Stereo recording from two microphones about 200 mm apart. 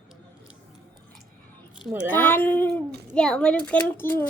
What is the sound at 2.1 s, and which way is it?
A child's voice, 10° left (ahead or behind).